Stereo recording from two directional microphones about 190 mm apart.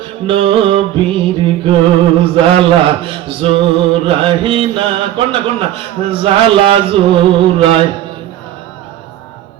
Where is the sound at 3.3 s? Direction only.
30° right (ahead or behind).